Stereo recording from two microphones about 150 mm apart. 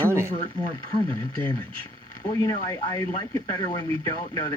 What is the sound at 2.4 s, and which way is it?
Speech, 20° left (ahead or behind).